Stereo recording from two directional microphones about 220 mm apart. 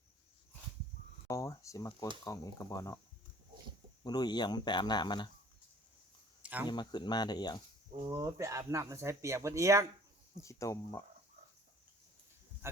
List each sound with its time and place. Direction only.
1.3 s speech: 15° left (ahead or behind)
4.0 s speech: 20° left (ahead or behind)
6.4 s a sound: 5° right (ahead or behind)
6.7 s speech: 20° left (ahead or behind)
8.0 s speech: 15° right (ahead or behind)
10.3 s speech: 15° left (ahead or behind)